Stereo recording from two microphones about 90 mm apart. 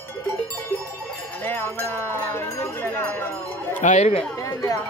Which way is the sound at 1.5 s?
25° left (ahead or behind).